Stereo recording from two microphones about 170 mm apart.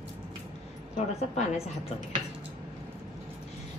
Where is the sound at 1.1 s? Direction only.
40° left (ahead or behind).